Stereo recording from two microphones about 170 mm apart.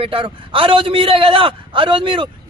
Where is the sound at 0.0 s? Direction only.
30° right (ahead or behind).